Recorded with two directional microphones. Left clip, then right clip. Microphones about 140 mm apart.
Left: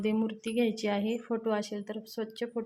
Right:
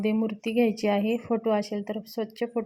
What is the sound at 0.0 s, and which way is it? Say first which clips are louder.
A woman's voice: right 4 dB; 15° right (ahead or behind).